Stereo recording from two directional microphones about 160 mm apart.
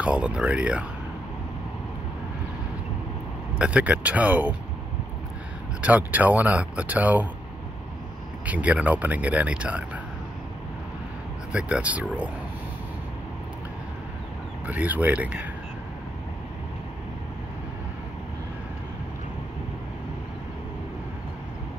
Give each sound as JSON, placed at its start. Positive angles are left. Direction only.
{"t": 0.0, "sound": "speech", "side_deg": -5}
{"t": 3.5, "sound": "speech", "side_deg": -5}
{"t": 5.8, "sound": "speech", "side_deg": -10}
{"t": 8.5, "sound": "speech", "side_deg": -10}
{"t": 11.5, "sound": "speech", "side_deg": -10}
{"t": 14.7, "sound": "speech", "side_deg": -10}